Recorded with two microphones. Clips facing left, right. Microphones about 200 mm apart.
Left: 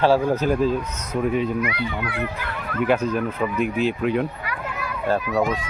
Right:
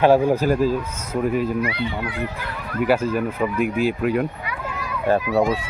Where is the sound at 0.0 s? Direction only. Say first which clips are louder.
Right 3 dB; 15° right (ahead or behind).